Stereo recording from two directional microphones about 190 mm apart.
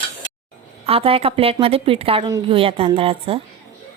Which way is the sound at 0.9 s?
30° right (ahead or behind).